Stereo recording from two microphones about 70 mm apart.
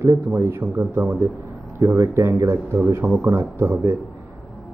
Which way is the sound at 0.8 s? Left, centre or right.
Right.